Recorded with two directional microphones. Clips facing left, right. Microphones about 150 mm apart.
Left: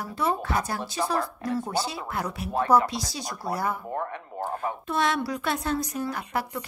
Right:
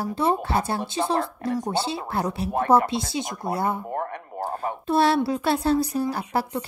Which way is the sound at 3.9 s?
40° right (ahead or behind).